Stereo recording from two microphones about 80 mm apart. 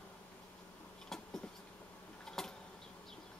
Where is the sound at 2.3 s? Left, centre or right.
Centre.